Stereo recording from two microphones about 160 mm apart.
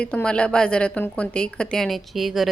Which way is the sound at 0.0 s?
5° left (ahead or behind).